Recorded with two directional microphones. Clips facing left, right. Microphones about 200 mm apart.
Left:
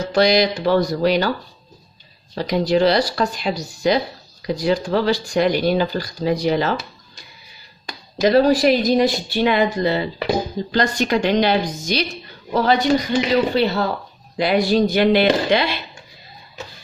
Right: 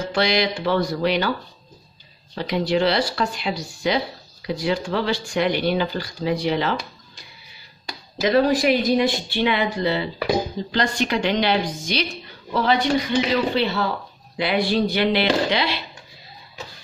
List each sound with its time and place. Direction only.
0.1 s speech: 40° left (ahead or behind)
2.3 s speech: 40° left (ahead or behind)
8.2 s speech: 40° left (ahead or behind)